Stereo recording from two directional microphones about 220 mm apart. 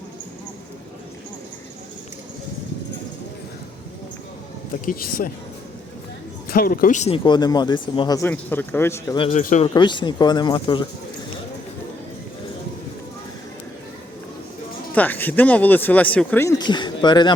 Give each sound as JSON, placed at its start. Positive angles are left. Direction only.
{"t": 4.9, "sound": "speech", "side_deg": 40}
{"t": 6.5, "sound": "speech", "side_deg": 40}
{"t": 9.4, "sound": "speech", "side_deg": 35}
{"t": 9.6, "sound": "speech", "side_deg": 20}
{"t": 14.9, "sound": "speech", "side_deg": 10}